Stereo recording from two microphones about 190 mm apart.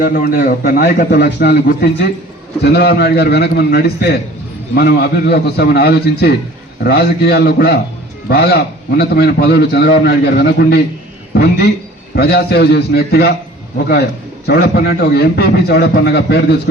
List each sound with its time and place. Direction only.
0.0 s a man's voice: 50° left (ahead or behind)